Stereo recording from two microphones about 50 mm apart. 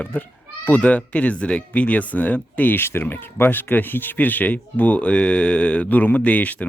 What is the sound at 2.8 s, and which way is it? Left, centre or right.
Speech, left.